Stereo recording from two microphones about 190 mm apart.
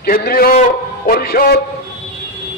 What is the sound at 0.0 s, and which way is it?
A man's voice, 50° left (ahead or behind).